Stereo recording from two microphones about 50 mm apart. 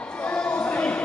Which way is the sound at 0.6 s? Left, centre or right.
Left.